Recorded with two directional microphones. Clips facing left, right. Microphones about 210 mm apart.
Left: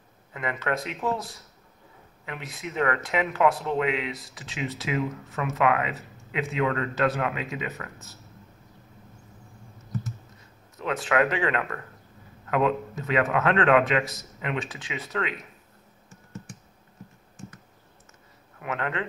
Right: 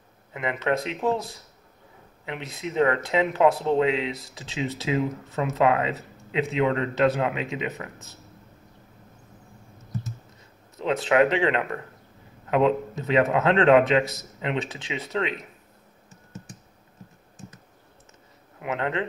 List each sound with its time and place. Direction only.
0.3 s speech: 20° right (ahead or behind)
2.2 s speech: 25° right (ahead or behind)
10.8 s speech: 25° right (ahead or behind)
18.6 s speech: 20° right (ahead or behind)